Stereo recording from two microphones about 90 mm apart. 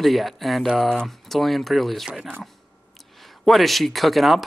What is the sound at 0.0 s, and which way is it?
Speech, centre (ahead or behind).